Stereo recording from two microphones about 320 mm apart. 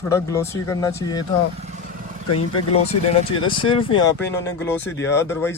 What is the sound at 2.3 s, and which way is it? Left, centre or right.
Speech, left.